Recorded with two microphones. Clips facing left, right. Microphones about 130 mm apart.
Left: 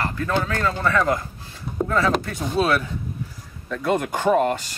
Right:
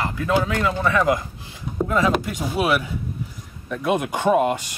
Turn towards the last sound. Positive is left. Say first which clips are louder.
# right 1 dB
turn(degrees=-15)  # may be behind; listen again after turning